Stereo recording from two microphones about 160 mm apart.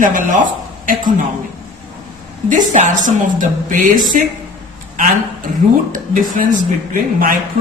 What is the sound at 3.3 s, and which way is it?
Speech, 55° right (ahead or behind).